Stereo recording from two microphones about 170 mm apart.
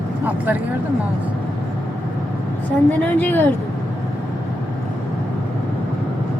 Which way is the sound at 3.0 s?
10° left (ahead or behind).